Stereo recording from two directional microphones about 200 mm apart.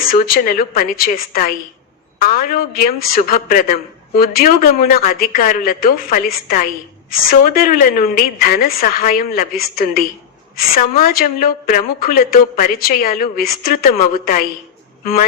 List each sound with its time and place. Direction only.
0.0 s a woman's voice: 45° left (ahead or behind)